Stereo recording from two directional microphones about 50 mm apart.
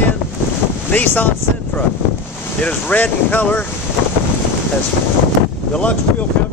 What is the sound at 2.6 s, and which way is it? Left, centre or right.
Speech, left.